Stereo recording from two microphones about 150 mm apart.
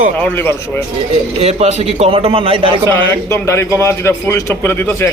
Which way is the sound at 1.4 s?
45° right (ahead or behind).